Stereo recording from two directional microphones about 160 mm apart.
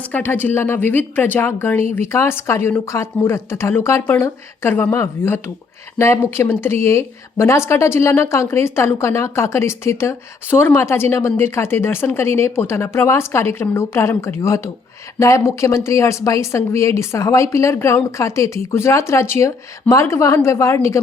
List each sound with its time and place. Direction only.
0.0 s a woman's voice: 10° left (ahead or behind)